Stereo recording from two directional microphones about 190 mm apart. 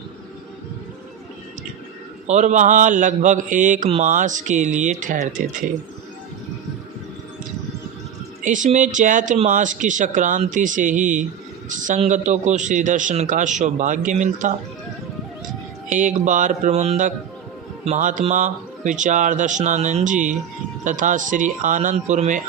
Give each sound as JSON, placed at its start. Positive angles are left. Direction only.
{"t": 2.2, "sound": "speech", "side_deg": -40}
{"t": 8.4, "sound": "speech", "side_deg": -40}
{"t": 16.2, "sound": "speech", "side_deg": -40}